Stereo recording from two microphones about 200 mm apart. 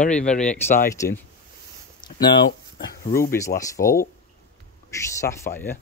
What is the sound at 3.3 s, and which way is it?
Speech, 15° left (ahead or behind).